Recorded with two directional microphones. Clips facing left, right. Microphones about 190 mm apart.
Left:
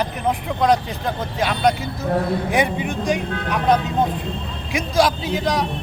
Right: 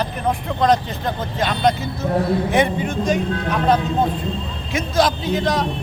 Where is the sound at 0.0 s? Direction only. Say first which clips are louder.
Even; 10° left (ahead or behind).